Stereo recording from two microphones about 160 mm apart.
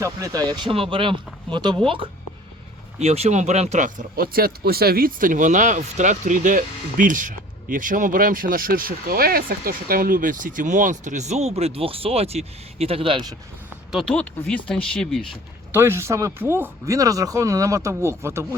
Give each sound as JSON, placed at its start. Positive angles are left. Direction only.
{"t": 0.0, "sound": "speech", "side_deg": -20}
{"t": 13.9, "sound": "speech", "side_deg": 5}
{"t": 15.7, "sound": "speech", "side_deg": -15}